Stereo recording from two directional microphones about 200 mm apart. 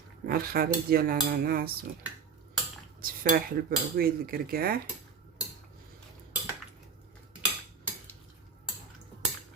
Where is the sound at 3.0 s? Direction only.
50° right (ahead or behind).